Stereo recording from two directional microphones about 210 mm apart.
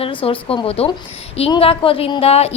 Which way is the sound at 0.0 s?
25° left (ahead or behind).